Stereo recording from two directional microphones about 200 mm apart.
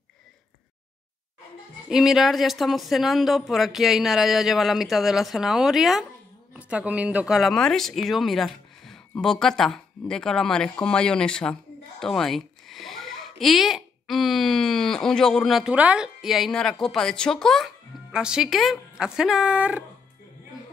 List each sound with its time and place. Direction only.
1.9 s speech: centre (ahead or behind)